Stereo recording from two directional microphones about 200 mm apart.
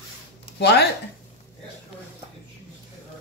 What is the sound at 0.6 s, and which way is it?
Speech, 55° left (ahead or behind).